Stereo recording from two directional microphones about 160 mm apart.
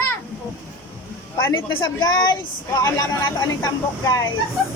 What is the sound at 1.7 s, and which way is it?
A woman's voice, 25° left (ahead or behind).